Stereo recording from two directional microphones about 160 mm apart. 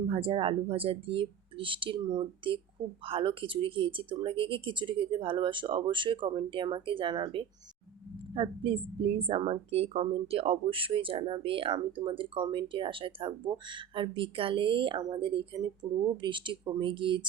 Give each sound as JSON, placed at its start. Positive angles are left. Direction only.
{"t": 0.1, "sound": "a woman's voice", "side_deg": -35}